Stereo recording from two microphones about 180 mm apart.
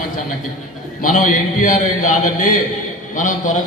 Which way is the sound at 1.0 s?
45° left (ahead or behind).